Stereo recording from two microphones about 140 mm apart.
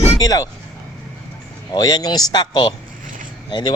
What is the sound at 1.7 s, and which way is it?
A man's voice, 30° left (ahead or behind).